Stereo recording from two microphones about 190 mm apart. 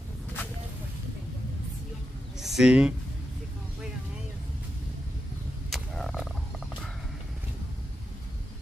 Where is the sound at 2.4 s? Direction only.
Centre (ahead or behind).